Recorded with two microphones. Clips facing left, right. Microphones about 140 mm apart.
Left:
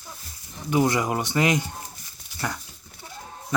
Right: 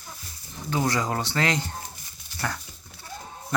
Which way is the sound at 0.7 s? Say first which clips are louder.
Left 4 dB; 15° left (ahead or behind).